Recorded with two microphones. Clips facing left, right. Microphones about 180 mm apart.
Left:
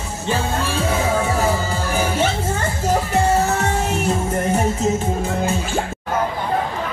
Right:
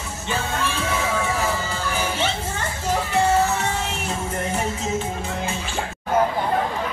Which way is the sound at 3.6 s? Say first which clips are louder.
Left 5 dB; 45° left (ahead or behind).